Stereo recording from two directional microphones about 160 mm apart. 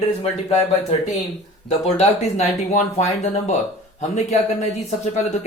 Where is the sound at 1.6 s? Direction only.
40° left (ahead or behind).